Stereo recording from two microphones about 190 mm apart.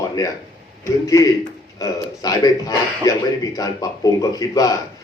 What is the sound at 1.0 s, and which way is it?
A man's voice, 15° left (ahead or behind).